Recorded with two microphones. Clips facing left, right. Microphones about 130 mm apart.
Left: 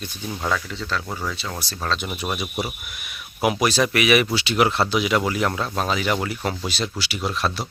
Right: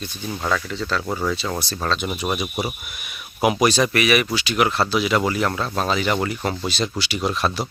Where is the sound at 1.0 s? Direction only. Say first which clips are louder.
Right 5 dB; 25° right (ahead or behind).